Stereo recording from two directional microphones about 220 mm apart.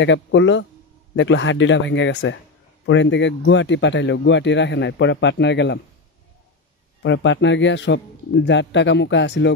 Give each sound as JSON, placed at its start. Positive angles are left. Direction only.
{"t": 0.0, "sound": "speech", "side_deg": 55}
{"t": 7.0, "sound": "speech", "side_deg": 55}